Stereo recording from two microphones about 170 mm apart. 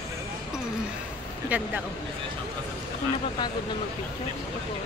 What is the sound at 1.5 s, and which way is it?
Speech, 10° right (ahead or behind).